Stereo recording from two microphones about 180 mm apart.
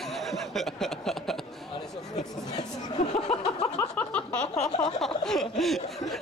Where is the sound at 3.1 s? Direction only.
35° left (ahead or behind).